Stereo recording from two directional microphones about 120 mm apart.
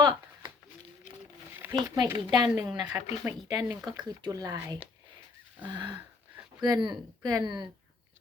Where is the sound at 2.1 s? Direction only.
35° right (ahead or behind).